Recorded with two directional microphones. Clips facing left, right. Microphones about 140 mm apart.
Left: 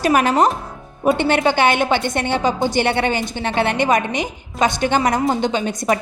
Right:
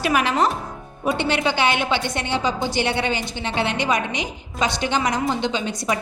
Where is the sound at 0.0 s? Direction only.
45° left (ahead or behind).